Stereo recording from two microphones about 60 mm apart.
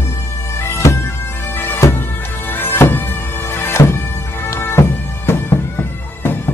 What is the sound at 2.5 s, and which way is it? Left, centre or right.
Music, left.